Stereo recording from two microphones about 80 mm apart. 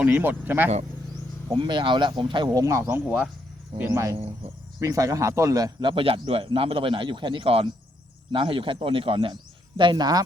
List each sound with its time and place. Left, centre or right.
0.0 s speech: right
1.5 s speech: right
2.5 s speech: right
2.8 s speech: right
3.8 s speech: right
5.8 s a man's voice: right